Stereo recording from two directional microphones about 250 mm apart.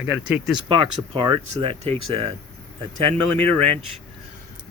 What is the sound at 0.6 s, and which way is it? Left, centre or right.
Speech, right.